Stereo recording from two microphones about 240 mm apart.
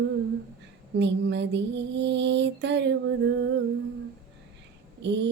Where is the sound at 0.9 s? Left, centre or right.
Right.